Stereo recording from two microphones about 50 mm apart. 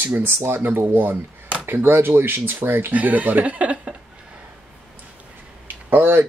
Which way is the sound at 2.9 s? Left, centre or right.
Right.